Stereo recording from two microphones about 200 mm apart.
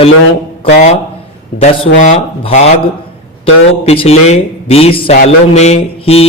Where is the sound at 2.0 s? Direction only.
35° left (ahead or behind).